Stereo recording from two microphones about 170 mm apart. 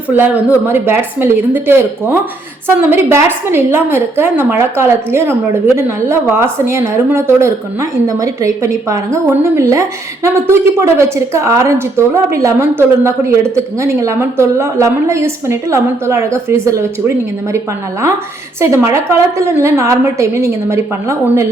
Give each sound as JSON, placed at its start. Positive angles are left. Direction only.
{"t": 0.1, "sound": "a woman's voice", "side_deg": -10}
{"t": 18.6, "sound": "a woman's voice", "side_deg": -15}